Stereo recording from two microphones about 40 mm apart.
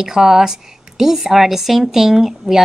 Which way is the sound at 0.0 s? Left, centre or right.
Centre.